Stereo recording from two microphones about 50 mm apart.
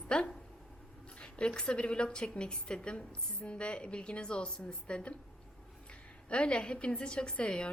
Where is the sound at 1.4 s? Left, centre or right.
Centre.